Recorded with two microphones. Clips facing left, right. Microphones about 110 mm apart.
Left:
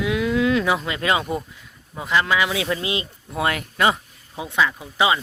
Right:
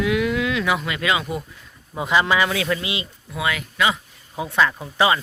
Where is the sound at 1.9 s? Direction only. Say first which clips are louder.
Right 2 dB; 5° right (ahead or behind).